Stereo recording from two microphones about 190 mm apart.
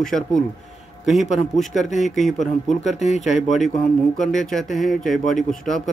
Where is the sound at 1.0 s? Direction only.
Centre (ahead or behind).